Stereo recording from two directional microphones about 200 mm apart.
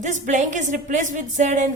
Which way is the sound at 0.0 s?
35° right (ahead or behind).